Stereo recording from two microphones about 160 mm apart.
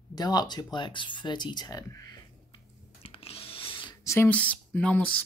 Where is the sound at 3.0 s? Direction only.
35° left (ahead or behind).